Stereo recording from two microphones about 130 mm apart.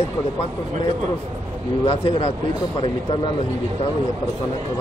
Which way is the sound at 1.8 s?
40° left (ahead or behind).